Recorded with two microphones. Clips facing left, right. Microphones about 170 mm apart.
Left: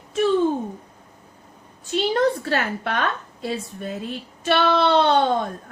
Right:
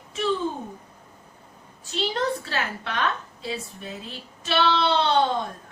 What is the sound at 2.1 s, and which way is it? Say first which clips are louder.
A woman's voice: left 7 dB; 50° left (ahead or behind).